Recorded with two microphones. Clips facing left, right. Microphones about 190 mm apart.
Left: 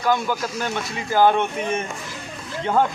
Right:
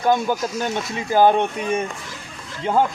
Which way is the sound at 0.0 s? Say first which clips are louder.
Right 3 dB; 20° right (ahead or behind).